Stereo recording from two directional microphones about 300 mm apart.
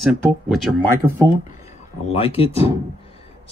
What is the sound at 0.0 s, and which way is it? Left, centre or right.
Speech, centre.